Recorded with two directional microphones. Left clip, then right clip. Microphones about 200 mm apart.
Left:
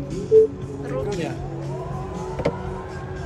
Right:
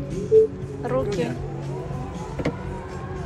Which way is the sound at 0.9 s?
Centre (ahead or behind).